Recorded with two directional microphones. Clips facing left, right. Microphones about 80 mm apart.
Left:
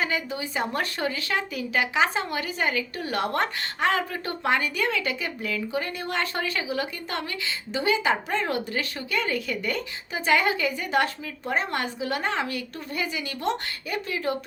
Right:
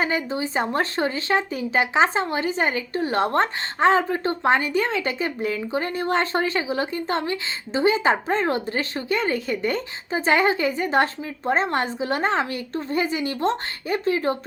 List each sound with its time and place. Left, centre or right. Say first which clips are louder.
0.0 s speech: right 4 dB; right